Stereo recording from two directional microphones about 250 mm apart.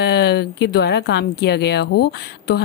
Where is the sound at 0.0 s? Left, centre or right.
Left.